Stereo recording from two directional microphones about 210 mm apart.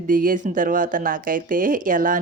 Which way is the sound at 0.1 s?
40° right (ahead or behind).